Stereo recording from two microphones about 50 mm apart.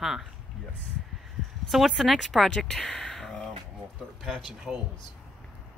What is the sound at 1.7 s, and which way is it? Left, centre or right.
Speech, centre.